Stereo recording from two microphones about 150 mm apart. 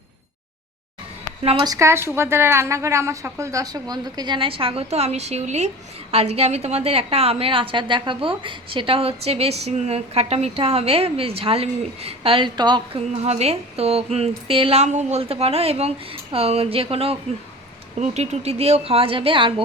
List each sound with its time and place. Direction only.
1.6 s a woman's voice: 20° right (ahead or behind)
13.1 s a woman's voice: 45° right (ahead or behind)